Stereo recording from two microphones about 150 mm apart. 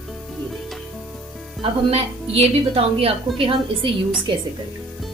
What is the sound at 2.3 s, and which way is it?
A woman's voice, 40° right (ahead or behind).